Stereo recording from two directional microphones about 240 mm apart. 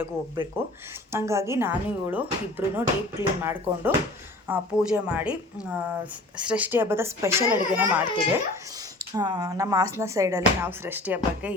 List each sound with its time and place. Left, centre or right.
0.6 s a woman's voice: centre
9.0 s a woman's voice: centre